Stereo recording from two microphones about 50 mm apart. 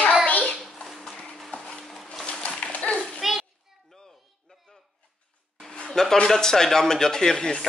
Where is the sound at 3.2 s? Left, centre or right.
Centre.